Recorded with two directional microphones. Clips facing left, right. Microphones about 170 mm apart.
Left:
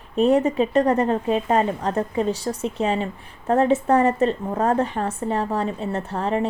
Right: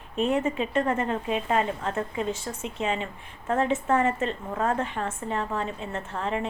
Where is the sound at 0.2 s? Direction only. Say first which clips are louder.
Left 7 dB; 40° left (ahead or behind).